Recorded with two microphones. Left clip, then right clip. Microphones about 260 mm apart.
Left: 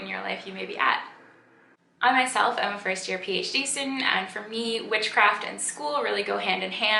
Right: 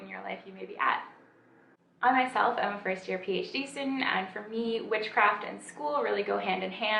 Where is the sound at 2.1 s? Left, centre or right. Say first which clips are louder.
Left 3 dB; centre.